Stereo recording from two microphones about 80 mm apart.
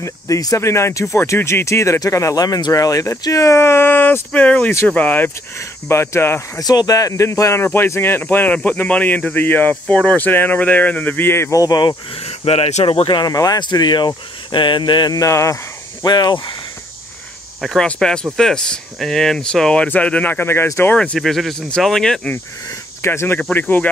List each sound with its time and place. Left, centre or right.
0.0 s speech: left
4.3 s speech: centre
5.6 s speech: left
6.6 s speech: left
11.5 s speech: left
13.0 s speech: left
13.3 s speech: left
15.1 s speech: left
16.1 s speech: left
17.6 s speech: centre; by 20.9 s left
20.9 s speech: centre
21.2 s speech: centre
22.3 s speech: left